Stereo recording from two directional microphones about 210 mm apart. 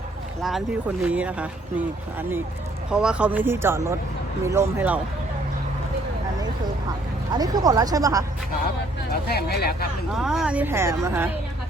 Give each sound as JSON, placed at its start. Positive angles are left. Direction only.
{"t": 0.4, "sound": "speech", "side_deg": -5}
{"t": 2.9, "sound": "speech", "side_deg": -5}
{"t": 7.3, "sound": "speech", "side_deg": -15}
{"t": 9.2, "sound": "speech", "side_deg": 50}
{"t": 10.2, "sound": "speech", "side_deg": 0}